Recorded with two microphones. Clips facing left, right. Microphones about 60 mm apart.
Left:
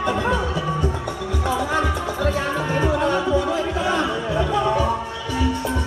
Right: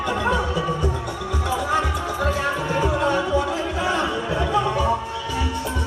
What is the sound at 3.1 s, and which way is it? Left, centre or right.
Music, right.